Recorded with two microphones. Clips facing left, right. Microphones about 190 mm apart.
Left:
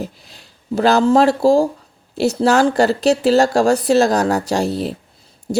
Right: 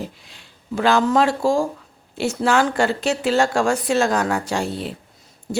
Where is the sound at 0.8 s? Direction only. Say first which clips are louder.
Left 4 dB; 40° left (ahead or behind).